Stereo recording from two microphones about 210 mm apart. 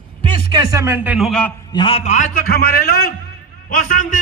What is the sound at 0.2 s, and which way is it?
A man's voice, 20° right (ahead or behind).